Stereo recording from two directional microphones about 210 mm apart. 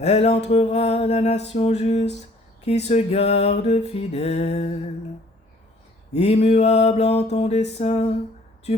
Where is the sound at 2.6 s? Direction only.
30° left (ahead or behind).